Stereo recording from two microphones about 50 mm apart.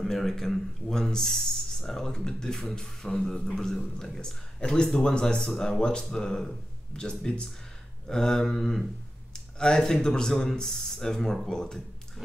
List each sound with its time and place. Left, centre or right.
0.0 s speech: centre